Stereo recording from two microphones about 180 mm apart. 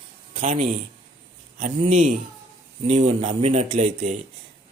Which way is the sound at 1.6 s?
45° right (ahead or behind).